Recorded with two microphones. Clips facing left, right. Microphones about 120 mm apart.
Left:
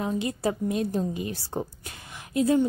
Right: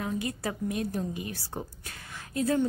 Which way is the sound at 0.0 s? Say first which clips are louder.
Left 5 dB; 25° left (ahead or behind).